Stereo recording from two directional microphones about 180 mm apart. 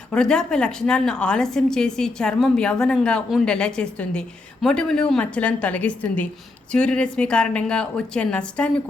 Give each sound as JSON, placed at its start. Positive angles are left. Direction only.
{"t": 0.1, "sound": "a woman's voice", "side_deg": 5}